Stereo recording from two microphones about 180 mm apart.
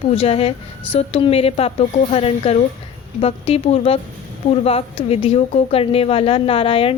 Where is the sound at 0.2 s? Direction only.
35° left (ahead or behind).